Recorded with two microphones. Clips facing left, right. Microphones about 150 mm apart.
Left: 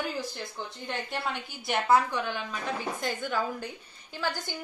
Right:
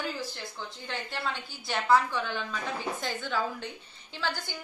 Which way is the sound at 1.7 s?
20° left (ahead or behind).